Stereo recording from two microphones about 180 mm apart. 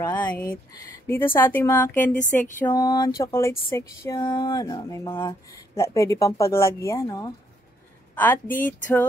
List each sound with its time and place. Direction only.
0.0 s speech: 10° left (ahead or behind)
2.7 s a sound: 20° left (ahead or behind)
3.2 s a woman's voice: 15° left (ahead or behind)
8.5 s speech: 50° left (ahead or behind)